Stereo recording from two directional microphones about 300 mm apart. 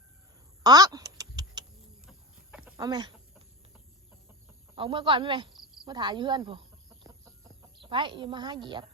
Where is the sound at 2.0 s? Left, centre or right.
Centre.